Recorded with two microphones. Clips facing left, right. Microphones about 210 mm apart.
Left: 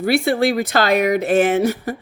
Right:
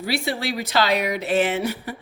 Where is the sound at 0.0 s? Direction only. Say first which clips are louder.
Left 9 dB; 55° left (ahead or behind).